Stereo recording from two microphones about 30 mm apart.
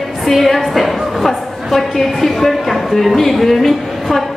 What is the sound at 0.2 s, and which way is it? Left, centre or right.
A woman's voice, centre.